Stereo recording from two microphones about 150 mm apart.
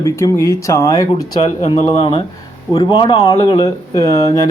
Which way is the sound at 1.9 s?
35° left (ahead or behind).